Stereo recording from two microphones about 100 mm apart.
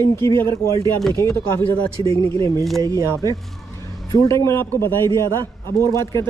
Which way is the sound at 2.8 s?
30° right (ahead or behind).